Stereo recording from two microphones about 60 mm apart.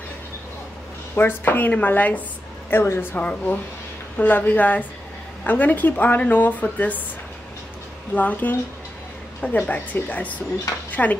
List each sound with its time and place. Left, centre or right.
1.1 s speech: left
2.7 s speech: left
8.1 s speech: left